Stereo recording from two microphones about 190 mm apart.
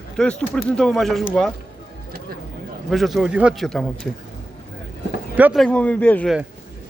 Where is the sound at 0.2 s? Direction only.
5° left (ahead or behind).